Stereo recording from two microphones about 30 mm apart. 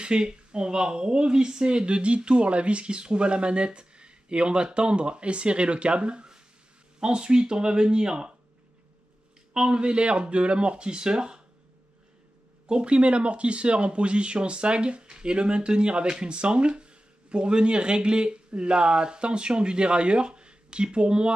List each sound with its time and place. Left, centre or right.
0.0 s speech: right
9.5 s speech: right
12.6 s speech: right